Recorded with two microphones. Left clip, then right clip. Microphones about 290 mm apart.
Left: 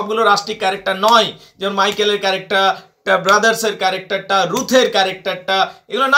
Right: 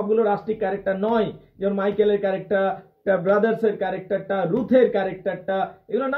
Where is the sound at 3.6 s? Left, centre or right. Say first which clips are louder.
Left 5 dB; left.